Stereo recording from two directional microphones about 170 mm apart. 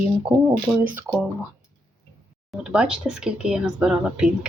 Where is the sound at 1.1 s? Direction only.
10° left (ahead or behind).